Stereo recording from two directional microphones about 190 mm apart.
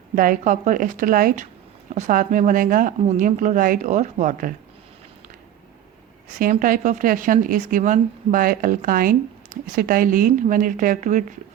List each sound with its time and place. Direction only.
0.2 s speech: 45° right (ahead or behind)
6.4 s speech: 45° right (ahead or behind)